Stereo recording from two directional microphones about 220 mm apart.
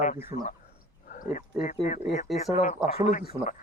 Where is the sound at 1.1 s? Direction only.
35° left (ahead or behind).